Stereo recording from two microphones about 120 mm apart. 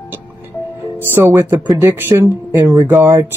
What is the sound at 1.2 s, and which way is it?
Speech, 20° right (ahead or behind).